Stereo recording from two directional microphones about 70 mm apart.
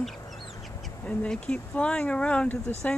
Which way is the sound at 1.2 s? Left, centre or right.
Centre.